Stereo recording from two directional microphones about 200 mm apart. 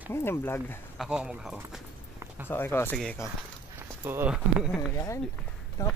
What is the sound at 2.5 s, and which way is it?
Speech, 10° left (ahead or behind).